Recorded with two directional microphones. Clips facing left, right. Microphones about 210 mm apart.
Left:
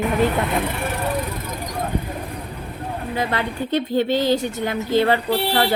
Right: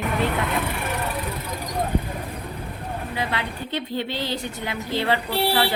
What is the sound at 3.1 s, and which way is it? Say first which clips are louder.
A woman's voice: left 5 dB; 45° left (ahead or behind).